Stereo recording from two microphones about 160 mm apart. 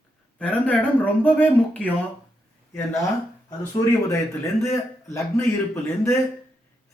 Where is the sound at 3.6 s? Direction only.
20° left (ahead or behind).